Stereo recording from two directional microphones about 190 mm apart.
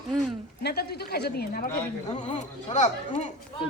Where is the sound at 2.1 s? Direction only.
40° left (ahead or behind).